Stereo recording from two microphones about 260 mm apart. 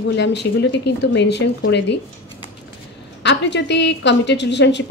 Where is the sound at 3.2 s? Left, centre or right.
Left.